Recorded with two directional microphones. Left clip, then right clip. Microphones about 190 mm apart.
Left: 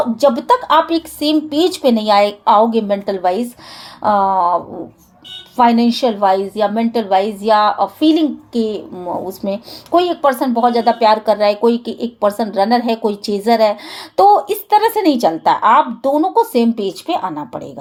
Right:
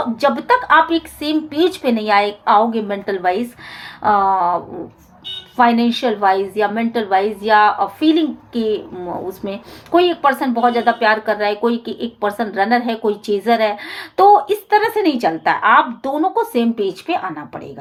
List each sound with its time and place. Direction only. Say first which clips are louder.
0.2 s a woman's voice: left 2 dB; 40° left (ahead or behind)
5.5 s a woman's voice: left 2 dB; 40° left (ahead or behind)